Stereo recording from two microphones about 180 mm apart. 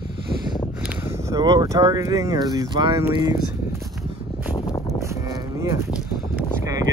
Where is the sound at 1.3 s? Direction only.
20° right (ahead or behind).